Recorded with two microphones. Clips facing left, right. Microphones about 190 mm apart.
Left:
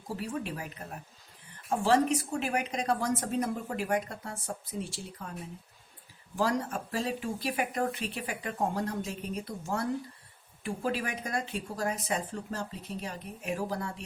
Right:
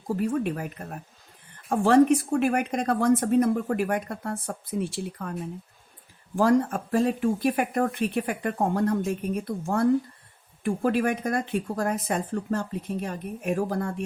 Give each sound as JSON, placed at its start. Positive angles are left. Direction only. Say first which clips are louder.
{"t": 0.1, "sound": "speech", "louder": "right 9 dB", "side_deg": -50}
{"t": 1.7, "sound": "speech", "louder": "right 7 dB", "side_deg": -55}